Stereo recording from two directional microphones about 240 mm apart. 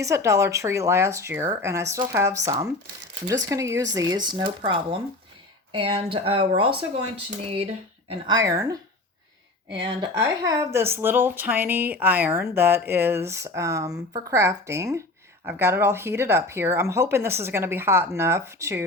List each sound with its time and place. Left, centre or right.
0.0 s speech: centre
9.8 s speech: centre